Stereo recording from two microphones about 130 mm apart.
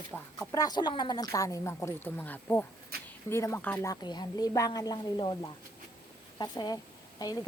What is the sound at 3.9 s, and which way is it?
A woman's voice, 35° left (ahead or behind).